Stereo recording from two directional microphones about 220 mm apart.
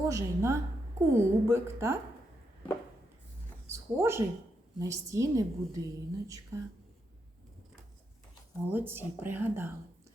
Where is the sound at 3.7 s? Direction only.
10° right (ahead or behind).